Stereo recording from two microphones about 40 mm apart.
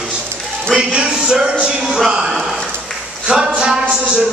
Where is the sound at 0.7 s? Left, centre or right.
Centre.